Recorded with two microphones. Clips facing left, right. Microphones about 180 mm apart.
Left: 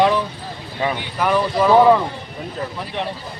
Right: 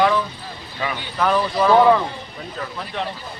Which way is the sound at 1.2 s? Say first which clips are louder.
Left 1 dB; 10° left (ahead or behind).